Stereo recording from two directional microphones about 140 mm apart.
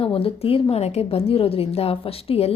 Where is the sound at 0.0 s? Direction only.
40° left (ahead or behind).